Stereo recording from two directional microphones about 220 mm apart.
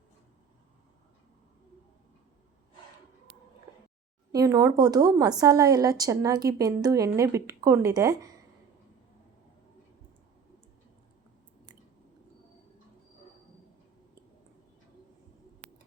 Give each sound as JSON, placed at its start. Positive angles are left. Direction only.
{"t": 4.3, "sound": "speech", "side_deg": -15}